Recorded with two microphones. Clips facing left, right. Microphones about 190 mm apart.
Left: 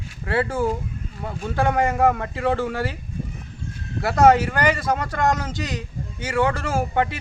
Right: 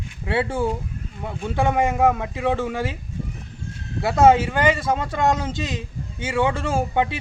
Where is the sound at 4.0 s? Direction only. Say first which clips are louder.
Even; 25° right (ahead or behind).